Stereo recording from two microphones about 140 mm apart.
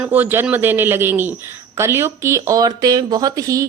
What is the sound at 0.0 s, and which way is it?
A man's voice, 15° right (ahead or behind).